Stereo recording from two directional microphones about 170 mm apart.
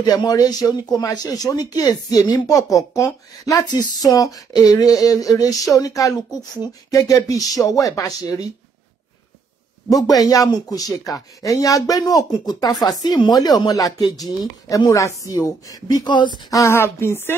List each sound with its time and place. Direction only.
0.0 s speech: 25° left (ahead or behind)
9.8 s speech: 20° left (ahead or behind)